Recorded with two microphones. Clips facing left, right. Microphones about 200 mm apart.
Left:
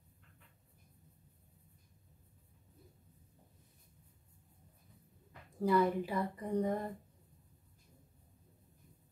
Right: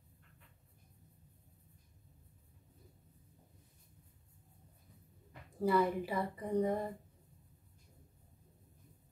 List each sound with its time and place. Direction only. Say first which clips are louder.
5.6 s speech: left 1 dB; 5° right (ahead or behind)